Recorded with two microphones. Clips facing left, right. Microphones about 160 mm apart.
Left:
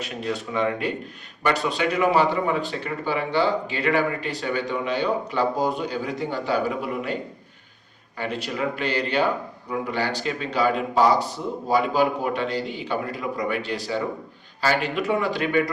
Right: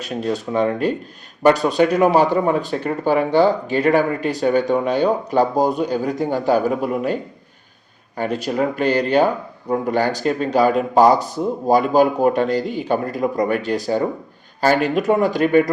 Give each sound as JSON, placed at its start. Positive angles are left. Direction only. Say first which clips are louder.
{"t": 0.0, "sound": "speech", "louder": "right 6 dB", "side_deg": -40}